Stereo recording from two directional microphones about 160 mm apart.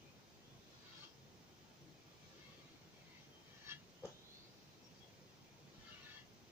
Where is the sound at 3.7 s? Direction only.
15° right (ahead or behind).